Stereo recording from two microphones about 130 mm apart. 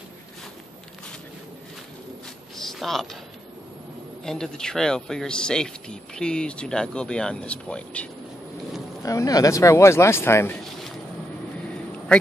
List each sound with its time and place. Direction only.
2.5 s a sound: centre (ahead or behind)
4.2 s speech: 5° left (ahead or behind)
9.0 s speech: 25° left (ahead or behind)